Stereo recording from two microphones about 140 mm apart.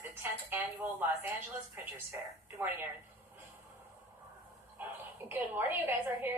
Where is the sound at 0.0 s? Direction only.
15° right (ahead or behind).